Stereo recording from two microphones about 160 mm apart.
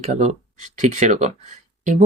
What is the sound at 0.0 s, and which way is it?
Speech, 50° right (ahead or behind).